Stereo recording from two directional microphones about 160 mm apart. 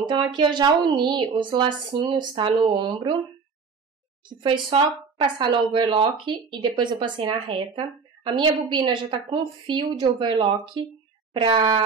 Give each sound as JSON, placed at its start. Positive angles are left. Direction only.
{"t": 0.0, "sound": "a woman's voice", "side_deg": -25}
{"t": 4.4, "sound": "a woman's voice", "side_deg": -30}